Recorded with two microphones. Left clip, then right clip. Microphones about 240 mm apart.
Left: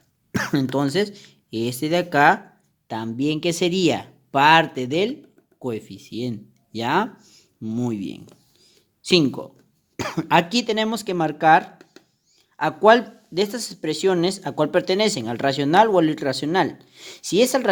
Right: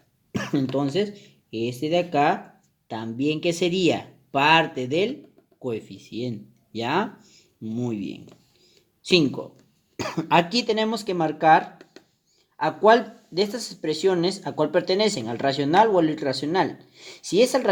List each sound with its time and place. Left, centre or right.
0.3 s speech: left